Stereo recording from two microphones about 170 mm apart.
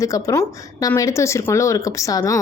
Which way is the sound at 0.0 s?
20° left (ahead or behind).